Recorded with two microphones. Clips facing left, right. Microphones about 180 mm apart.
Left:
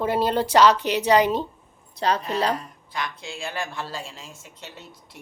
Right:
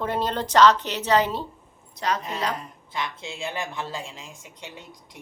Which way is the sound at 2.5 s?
25° right (ahead or behind).